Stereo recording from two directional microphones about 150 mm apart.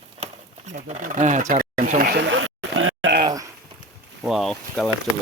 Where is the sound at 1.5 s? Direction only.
40° right (ahead or behind).